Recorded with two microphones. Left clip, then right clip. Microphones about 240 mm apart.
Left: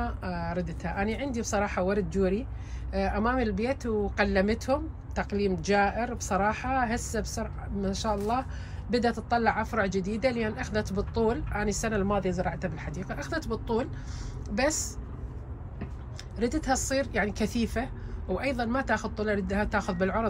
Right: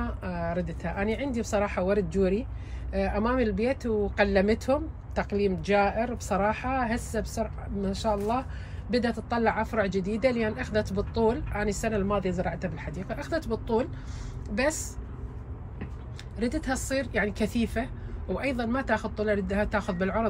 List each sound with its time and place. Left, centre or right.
0.0 s speech: centre
16.3 s speech: centre